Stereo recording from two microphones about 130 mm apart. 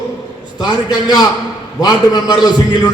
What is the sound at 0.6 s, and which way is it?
A man's voice, 35° left (ahead or behind).